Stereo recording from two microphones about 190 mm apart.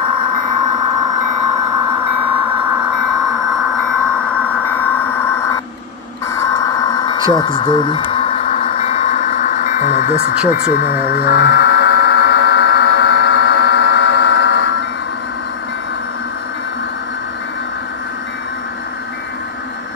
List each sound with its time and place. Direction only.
6.3 s a sound: 15° left (ahead or behind); by 10.1 s 45° left (ahead or behind)
10.5 s speech: 50° left (ahead or behind)
11.1 s buzzer: 55° left (ahead or behind)